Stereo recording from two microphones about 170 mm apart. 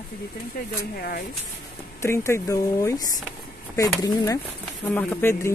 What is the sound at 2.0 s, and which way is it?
Speech, 15° left (ahead or behind).